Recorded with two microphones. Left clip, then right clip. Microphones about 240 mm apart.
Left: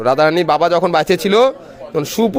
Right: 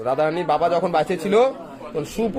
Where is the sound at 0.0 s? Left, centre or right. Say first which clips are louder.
Left 8 dB; left.